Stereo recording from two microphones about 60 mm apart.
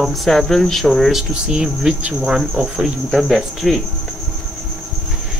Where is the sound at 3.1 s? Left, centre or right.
Centre.